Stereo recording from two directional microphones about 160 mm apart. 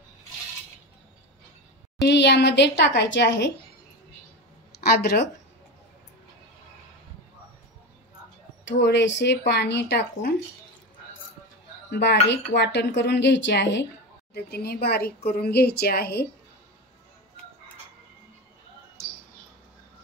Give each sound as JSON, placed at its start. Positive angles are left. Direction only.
{"t": 2.0, "sound": "speech", "side_deg": 90}
{"t": 4.8, "sound": "a woman's voice", "side_deg": 75}
{"t": 8.6, "sound": "speech", "side_deg": 90}
{"t": 11.9, "sound": "speech", "side_deg": 90}
{"t": 14.3, "sound": "a woman's voice", "side_deg": 75}